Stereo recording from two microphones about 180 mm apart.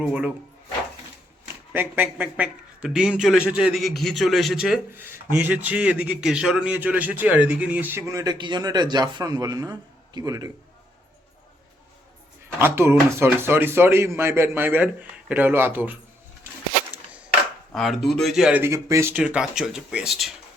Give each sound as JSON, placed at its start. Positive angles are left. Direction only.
{"t": 0.0, "sound": "a man's voice", "side_deg": -5}
{"t": 1.7, "sound": "a man's voice", "side_deg": -10}
{"t": 12.5, "sound": "a man's voice", "side_deg": -15}
{"t": 17.7, "sound": "a man's voice", "side_deg": 0}